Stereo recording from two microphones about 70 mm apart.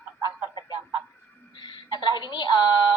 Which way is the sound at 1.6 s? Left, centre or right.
Left.